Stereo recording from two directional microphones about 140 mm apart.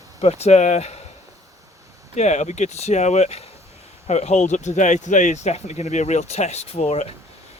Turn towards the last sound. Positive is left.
turn(degrees=50)  # may be behind; listen again after turning